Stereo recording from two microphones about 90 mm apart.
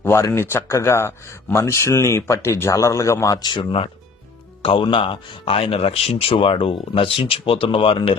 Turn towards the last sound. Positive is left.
turn(degrees=90)